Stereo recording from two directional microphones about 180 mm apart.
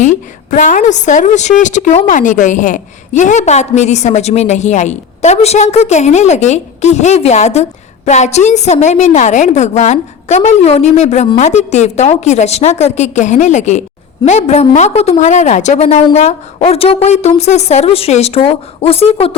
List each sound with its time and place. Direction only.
0.0 s a woman's voice: 45° left (ahead or behind)